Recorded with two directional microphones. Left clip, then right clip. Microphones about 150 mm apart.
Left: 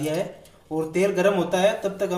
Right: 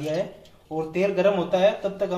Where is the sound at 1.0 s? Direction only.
25° left (ahead or behind).